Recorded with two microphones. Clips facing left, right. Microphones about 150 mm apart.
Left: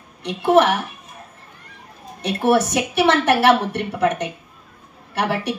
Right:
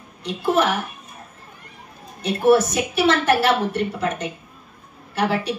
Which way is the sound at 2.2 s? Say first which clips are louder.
Right 2 dB; 70° left (ahead or behind).